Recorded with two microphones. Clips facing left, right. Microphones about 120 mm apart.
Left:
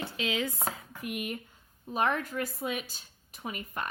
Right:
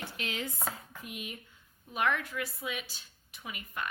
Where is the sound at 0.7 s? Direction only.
60° left (ahead or behind).